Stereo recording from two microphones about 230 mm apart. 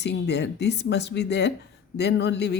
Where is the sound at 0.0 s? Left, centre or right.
Left.